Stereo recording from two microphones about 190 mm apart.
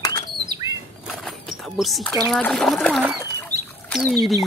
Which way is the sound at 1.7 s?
Centre (ahead or behind).